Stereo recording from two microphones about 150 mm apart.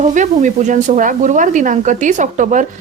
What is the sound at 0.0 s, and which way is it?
Speech, 55° right (ahead or behind).